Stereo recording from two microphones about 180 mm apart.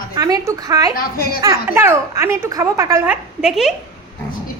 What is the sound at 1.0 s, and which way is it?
Speech, 55° left (ahead or behind).